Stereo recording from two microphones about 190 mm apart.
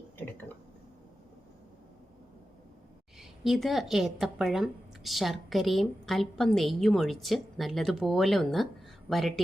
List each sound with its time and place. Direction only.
3.2 s speech: centre (ahead or behind)